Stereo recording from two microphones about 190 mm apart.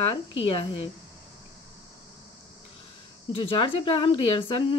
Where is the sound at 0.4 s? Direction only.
30° left (ahead or behind).